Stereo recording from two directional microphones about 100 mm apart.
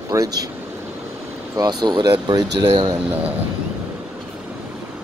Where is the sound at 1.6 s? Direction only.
45° right (ahead or behind).